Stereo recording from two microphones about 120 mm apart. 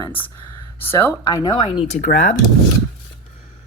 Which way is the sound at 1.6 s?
40° left (ahead or behind).